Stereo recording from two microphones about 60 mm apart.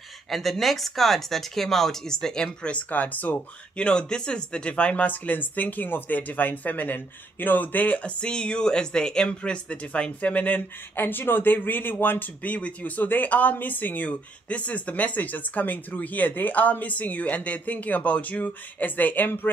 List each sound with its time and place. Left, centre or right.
0.3 s speech: centre; by 19.5 s left